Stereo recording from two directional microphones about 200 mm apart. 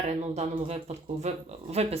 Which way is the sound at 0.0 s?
35° right (ahead or behind).